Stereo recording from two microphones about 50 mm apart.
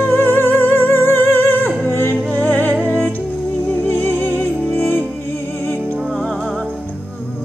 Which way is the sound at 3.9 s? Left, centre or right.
Left.